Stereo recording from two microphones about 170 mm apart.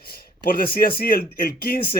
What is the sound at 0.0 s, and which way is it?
Speech, 60° left (ahead or behind).